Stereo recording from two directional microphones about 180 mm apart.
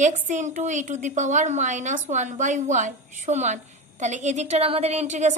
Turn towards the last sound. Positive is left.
turn(degrees=-40)  # may be behind; listen again after turning